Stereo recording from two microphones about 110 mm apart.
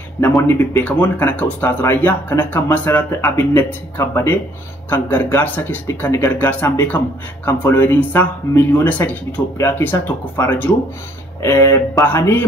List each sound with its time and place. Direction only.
0.4 s speech: 15° left (ahead or behind)